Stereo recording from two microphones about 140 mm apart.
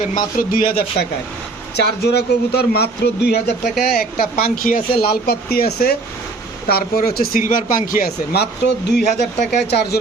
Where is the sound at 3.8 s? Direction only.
90° left.